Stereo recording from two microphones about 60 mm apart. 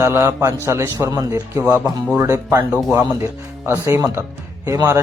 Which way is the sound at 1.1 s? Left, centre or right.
Right.